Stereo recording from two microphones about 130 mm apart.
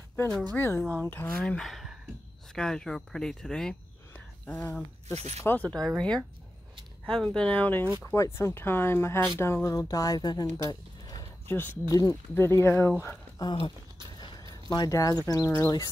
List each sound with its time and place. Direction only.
0.6 s speech: 15° left (ahead or behind)
1.4 s speech: 5° left (ahead or behind)
5.0 s speech: 55° right (ahead or behind)
5.4 s speech: 15° left (ahead or behind); by 10.4 s 30° left (ahead or behind)
10.7 s a sound: 30° left (ahead or behind)
11.4 s speech: 15° left (ahead or behind)
13.4 s speech: 35° left (ahead or behind)